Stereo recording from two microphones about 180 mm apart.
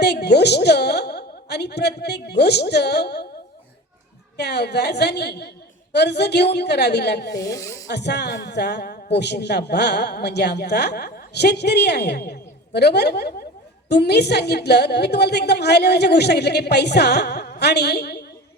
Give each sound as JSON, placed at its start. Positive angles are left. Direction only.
{"t": 0.0, "sound": "a woman's voice", "side_deg": 65}
{"t": 4.4, "sound": "a woman's voice", "side_deg": 65}
{"t": 7.3, "sound": "speech", "side_deg": 20}
{"t": 7.9, "sound": "a woman's voice", "side_deg": 70}